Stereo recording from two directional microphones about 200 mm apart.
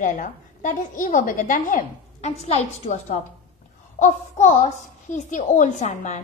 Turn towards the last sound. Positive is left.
turn(degrees=35)  # may be behind; listen again after turning